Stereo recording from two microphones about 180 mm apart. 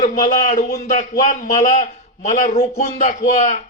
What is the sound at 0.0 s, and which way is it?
A man's voice, 45° left (ahead or behind).